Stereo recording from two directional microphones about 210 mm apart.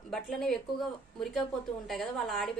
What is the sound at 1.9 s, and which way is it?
Speech, centre (ahead or behind).